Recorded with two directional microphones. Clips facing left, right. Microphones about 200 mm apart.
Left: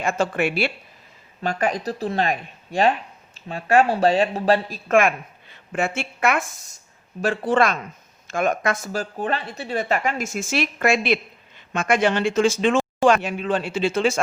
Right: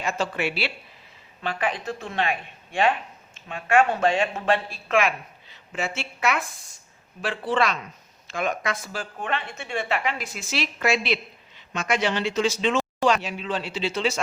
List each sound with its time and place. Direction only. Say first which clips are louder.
0.0 s a woman's voice: left 5 dB; 50° left (ahead or behind)